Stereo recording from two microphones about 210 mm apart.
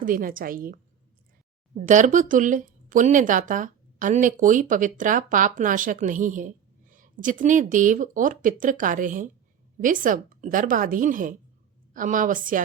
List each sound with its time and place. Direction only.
0.0 s speech: 40° right (ahead or behind)